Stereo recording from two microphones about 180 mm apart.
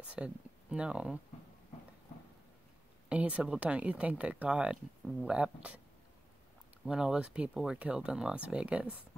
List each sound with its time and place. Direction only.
0.1 s speech: 5° right (ahead or behind)
3.1 s speech: 5° right (ahead or behind)
6.9 s speech: 5° right (ahead or behind)